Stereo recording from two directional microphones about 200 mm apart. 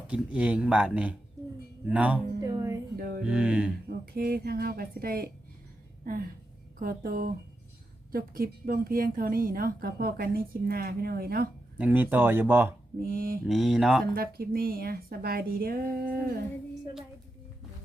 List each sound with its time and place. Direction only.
0.1 s speech: 5° right (ahead or behind)
2.4 s music: 15° right (ahead or behind)
2.9 s music: 45° right (ahead or behind)
3.2 s speech: 5° right (ahead or behind)
3.8 s a woman's voice: 50° right (ahead or behind)
6.7 s a woman's voice: 45° right (ahead or behind)
11.8 s speech: 10° right (ahead or behind)
13.0 s a woman's voice: 45° right (ahead or behind)
13.4 s speech: centre (ahead or behind)
14.0 s a woman's voice: 50° right (ahead or behind)